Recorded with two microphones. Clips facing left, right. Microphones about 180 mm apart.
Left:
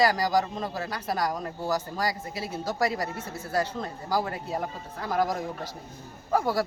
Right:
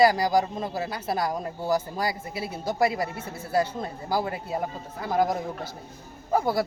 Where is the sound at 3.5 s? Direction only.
25° right (ahead or behind).